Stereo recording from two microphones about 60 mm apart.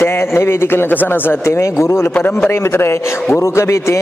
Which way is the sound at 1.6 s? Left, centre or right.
Left.